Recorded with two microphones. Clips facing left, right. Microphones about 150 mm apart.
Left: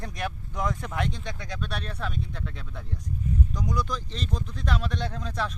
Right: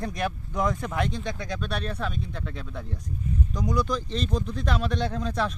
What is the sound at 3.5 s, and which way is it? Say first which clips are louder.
Speech: right 4 dB; 20° right (ahead or behind).